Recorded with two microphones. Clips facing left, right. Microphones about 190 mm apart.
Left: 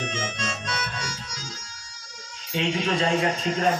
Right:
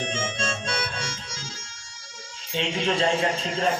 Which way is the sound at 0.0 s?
30° right (ahead or behind).